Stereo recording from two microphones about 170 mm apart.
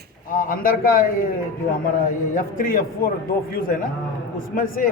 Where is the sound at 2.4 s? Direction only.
55° left (ahead or behind).